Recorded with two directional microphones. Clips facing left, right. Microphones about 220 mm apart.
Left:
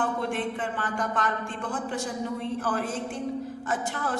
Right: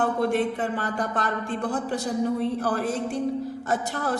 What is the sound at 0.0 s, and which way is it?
A woman's voice, 40° right (ahead or behind).